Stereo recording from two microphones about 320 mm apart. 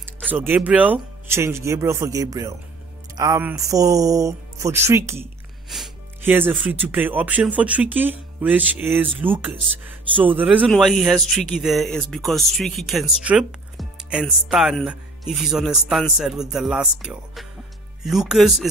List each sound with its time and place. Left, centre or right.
0.0 s speech: centre